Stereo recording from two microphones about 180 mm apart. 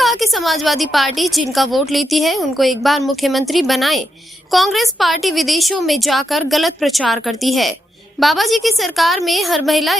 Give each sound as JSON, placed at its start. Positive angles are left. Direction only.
{"t": 0.0, "sound": "speech", "side_deg": 0}